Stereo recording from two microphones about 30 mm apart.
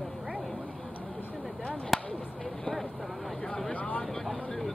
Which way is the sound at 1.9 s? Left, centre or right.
Centre.